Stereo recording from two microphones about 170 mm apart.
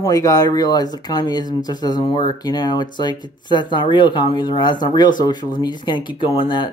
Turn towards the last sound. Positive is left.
turn(degrees=30)  # may be behind; listen again after turning